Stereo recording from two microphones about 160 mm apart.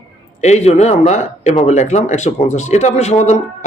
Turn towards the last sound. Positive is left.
turn(degrees=45)  # may be behind; listen again after turning